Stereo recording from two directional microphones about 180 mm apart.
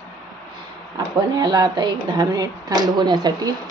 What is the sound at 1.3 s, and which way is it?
A woman's voice, 20° right (ahead or behind).